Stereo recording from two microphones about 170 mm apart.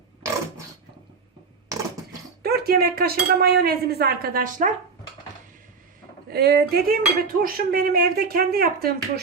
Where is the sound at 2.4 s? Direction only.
65° right (ahead or behind).